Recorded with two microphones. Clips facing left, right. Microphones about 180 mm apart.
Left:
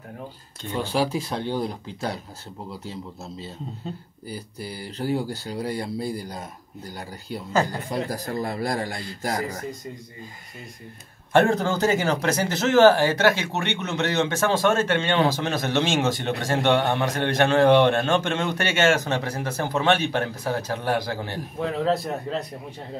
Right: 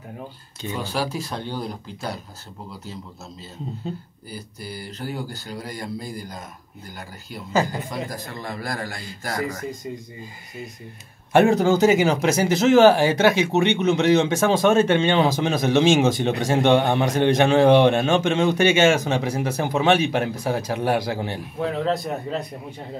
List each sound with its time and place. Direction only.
0.6 s speech: 5° right (ahead or behind)
4.9 s a man's voice: 30° left (ahead or behind)
8.1 s a man's voice: 35° left (ahead or behind)
11.3 s speech: 10° right (ahead or behind)
21.5 s a man's voice: centre (ahead or behind)